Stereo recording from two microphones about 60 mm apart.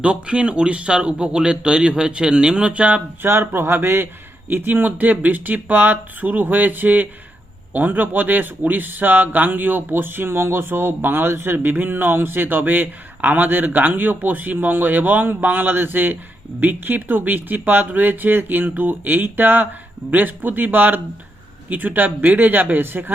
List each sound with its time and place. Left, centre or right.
0.0 s speech: centre
3.2 s speech: right